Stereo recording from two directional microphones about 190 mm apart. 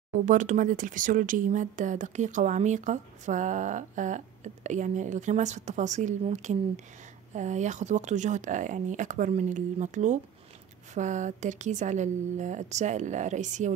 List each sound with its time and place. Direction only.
0.1 s speech: 40° right (ahead or behind)